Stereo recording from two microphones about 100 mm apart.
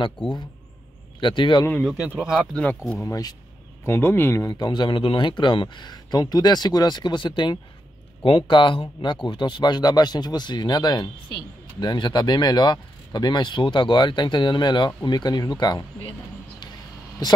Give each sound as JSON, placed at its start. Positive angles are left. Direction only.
{"t": 1.2, "sound": "speech", "side_deg": 50}
{"t": 2.0, "sound": "speech", "side_deg": -10}
{"t": 2.5, "sound": "speech", "side_deg": 15}
{"t": 3.0, "sound": "speech", "side_deg": 35}
{"t": 3.8, "sound": "speech", "side_deg": 25}
{"t": 17.2, "sound": "speech", "side_deg": 45}